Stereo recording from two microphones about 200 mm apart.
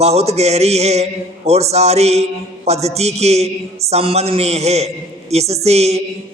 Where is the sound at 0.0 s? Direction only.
30° right (ahead or behind).